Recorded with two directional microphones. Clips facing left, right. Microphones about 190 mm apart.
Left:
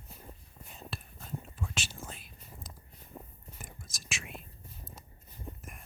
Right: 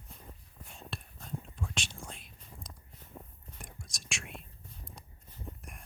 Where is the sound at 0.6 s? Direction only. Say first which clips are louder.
Left 1 dB; centre (ahead or behind).